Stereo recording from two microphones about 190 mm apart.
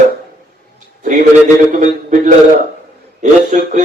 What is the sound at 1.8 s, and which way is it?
A man's voice, 40° right (ahead or behind).